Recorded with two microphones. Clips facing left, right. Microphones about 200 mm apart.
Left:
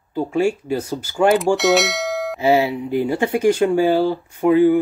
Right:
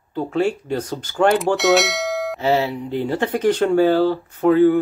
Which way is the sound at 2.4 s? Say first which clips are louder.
Left 3 dB; 10° left (ahead or behind).